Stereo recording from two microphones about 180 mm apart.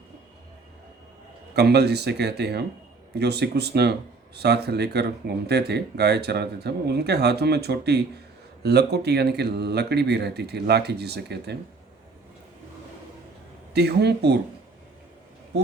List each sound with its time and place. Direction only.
1.5 s speech: 65° right (ahead or behind)
13.7 s speech: 65° right (ahead or behind)